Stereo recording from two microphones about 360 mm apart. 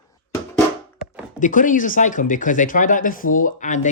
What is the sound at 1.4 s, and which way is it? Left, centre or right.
Speech, left.